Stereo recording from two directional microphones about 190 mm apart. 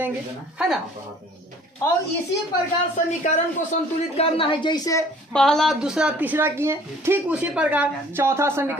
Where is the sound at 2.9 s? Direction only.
40° left (ahead or behind); by 5.0 s 20° left (ahead or behind).